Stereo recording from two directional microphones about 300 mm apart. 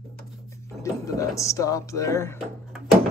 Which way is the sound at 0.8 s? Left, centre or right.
Centre.